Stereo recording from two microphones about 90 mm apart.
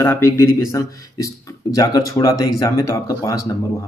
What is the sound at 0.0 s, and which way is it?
Speech, 30° left (ahead or behind).